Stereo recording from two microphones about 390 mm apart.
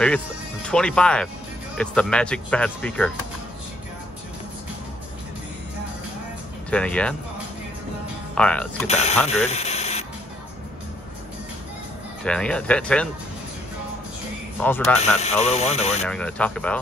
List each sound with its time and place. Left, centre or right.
0.7 s speech: centre
6.7 s speech: centre
8.4 s speech: centre
8.8 s speech: centre
9.3 s a sound: centre
12.3 s speech: centre
14.6 s speech: centre
15.0 s speech: centre
16.1 s speech: centre